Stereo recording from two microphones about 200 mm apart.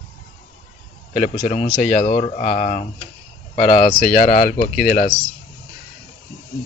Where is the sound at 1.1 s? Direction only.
35° left (ahead or behind).